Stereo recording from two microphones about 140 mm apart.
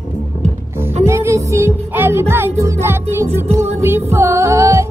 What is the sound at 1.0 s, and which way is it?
Music, 20° right (ahead or behind).